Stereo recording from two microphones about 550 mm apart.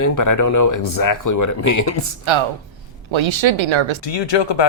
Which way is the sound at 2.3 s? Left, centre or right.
Right.